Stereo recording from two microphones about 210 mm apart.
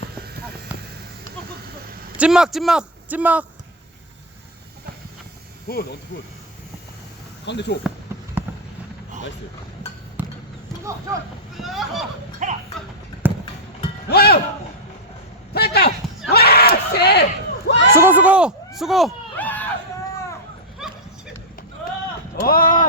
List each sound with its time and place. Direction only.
2.1 s speech: 5° right (ahead or behind)
5.7 s speech: 45° left (ahead or behind)
7.4 s speech: 55° left (ahead or behind)
8.4 s fireworks: 10° right (ahead or behind)
10.2 s basketball bounce: 10° right (ahead or behind)
11.1 s speech: 15° right (ahead or behind)
11.5 s a sound: centre (ahead or behind)
12.4 s speech: 35° right (ahead or behind)
13.2 s a sound: 10° right (ahead or behind)
14.1 s speech: 50° left (ahead or behind)
15.5 s a sound: 50° left (ahead or behind)
17.9 s speech: 10° right (ahead or behind); by 19.6 s 10° left (ahead or behind)
22.4 s speech: 45° left (ahead or behind)